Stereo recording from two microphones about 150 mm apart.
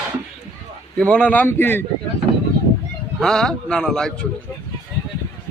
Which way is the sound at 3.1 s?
5° left (ahead or behind).